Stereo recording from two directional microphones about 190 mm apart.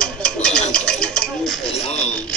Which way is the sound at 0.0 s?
5° left (ahead or behind).